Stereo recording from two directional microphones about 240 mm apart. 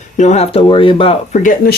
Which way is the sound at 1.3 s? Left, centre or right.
Left.